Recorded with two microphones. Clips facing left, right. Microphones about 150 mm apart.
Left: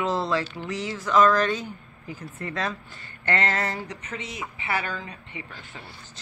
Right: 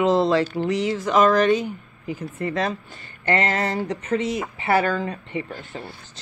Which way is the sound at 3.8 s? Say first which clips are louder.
Right 13 dB; 40° right (ahead or behind).